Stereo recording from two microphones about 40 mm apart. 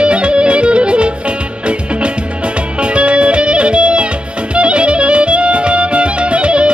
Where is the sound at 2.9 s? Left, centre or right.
Right.